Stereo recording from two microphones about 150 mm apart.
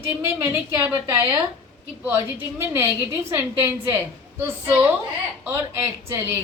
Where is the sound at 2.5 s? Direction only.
15° right (ahead or behind).